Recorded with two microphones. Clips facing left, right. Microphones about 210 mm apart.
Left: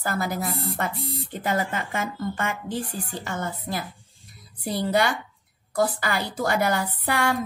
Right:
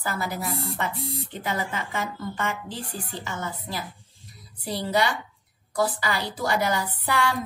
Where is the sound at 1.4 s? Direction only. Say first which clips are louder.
Left 4 dB; 50° left (ahead or behind).